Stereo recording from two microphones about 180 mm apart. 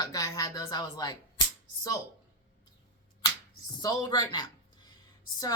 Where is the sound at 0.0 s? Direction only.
20° left (ahead or behind).